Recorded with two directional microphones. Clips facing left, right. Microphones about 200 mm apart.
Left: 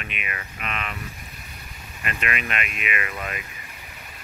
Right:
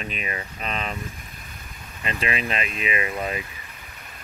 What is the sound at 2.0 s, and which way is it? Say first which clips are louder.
Speech: right 3 dB; 30° right (ahead or behind).